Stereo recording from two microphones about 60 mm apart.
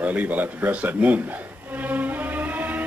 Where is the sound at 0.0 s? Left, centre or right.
Right.